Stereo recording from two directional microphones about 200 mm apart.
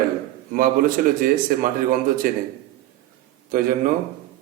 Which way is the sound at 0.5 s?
45° right (ahead or behind).